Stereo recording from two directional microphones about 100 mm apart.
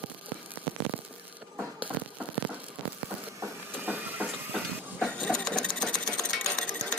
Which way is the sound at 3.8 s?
20° right (ahead or behind).